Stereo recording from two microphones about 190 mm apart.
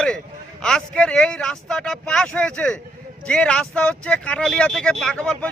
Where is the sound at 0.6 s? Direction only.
5° left (ahead or behind).